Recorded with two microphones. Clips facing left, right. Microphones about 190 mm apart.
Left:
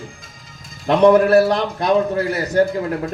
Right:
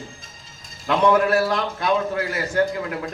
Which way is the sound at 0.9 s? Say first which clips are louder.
Left 6 dB; 35° left (ahead or behind).